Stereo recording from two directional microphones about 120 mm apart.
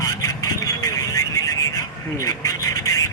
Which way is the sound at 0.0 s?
30° left (ahead or behind).